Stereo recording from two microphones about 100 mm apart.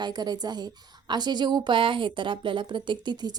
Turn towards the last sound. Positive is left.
turn(degrees=-45)  # may be behind; listen again after turning